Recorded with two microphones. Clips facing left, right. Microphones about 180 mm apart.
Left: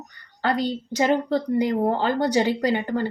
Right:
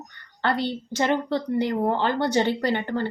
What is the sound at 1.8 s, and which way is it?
Speech, 40° left (ahead or behind).